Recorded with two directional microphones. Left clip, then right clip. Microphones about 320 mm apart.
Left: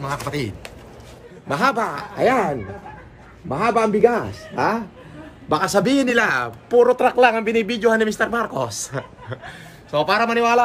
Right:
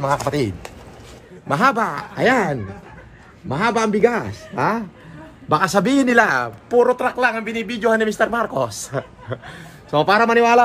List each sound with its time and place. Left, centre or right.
0.0 s a man's voice: centre
1.5 s speech: right; by 9.6 s centre
9.8 s a man's voice: centre